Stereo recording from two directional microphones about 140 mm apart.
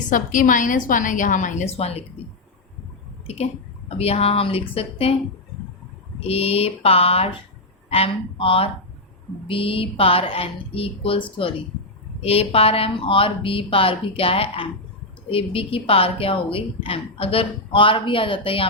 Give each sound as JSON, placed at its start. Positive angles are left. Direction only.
{"t": 0.1, "sound": "a woman's voice", "side_deg": 70}
{"t": 3.2, "sound": "speech", "side_deg": 50}
{"t": 4.7, "sound": "mantra", "side_deg": 45}
{"t": 6.1, "sound": "mantra", "side_deg": 45}
{"t": 9.5, "sound": "a woman's voice", "side_deg": 40}